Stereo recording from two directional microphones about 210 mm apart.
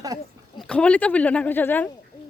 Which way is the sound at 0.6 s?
5° left (ahead or behind).